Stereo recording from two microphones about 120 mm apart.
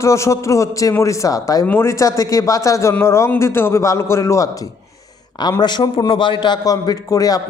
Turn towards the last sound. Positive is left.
turn(degrees=30)  # may be behind; listen again after turning